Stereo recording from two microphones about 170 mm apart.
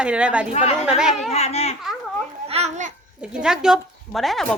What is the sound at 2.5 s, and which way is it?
Babbling, 40° right (ahead or behind).